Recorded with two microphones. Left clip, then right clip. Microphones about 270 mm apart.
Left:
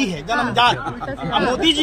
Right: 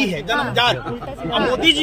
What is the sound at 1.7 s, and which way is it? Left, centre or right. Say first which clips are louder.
Speech: right 3 dB; centre.